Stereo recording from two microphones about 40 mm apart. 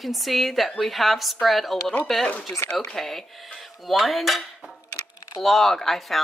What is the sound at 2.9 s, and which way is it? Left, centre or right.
A woman's voice, centre.